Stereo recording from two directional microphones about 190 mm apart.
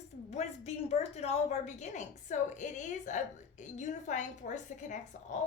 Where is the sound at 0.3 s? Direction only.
35° left (ahead or behind).